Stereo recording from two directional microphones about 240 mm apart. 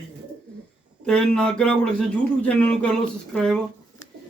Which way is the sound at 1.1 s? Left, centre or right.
Centre.